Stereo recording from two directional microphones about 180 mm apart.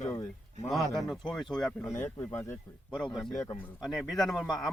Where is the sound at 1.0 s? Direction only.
Centre (ahead or behind).